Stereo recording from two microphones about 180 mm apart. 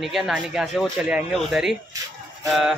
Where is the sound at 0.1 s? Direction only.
5° right (ahead or behind).